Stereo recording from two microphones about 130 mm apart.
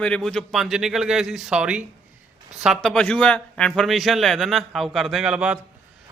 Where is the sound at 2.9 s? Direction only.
5° left (ahead or behind).